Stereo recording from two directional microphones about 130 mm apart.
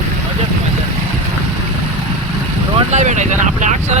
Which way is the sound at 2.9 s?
70° right (ahead or behind).